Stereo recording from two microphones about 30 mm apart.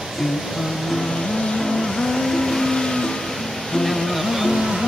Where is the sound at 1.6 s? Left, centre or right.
Centre.